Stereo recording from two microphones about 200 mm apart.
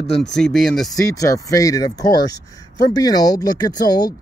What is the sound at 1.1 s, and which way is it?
Speech, 15° left (ahead or behind).